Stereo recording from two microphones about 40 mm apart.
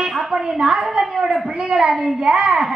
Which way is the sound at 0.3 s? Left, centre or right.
Centre.